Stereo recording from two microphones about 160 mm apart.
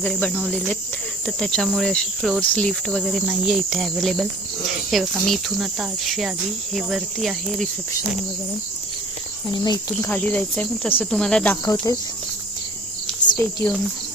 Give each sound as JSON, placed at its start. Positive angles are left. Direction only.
{"t": 0.0, "sound": "speech", "side_deg": 5}
{"t": 1.4, "sound": "cricket", "side_deg": 5}
{"t": 9.5, "sound": "speech", "side_deg": 25}
{"t": 9.9, "sound": "speech", "side_deg": 10}
{"t": 13.3, "sound": "speech", "side_deg": 10}